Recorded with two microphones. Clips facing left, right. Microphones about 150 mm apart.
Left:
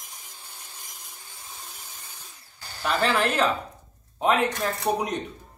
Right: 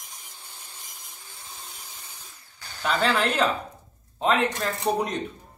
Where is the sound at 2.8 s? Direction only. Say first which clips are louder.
Even; 5° left (ahead or behind).